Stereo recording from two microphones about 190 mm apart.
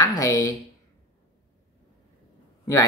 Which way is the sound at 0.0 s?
15° left (ahead or behind).